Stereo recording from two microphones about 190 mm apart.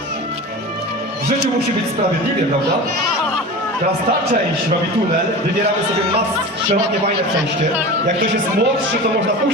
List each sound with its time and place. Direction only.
8.0 s speech: 45° right (ahead or behind)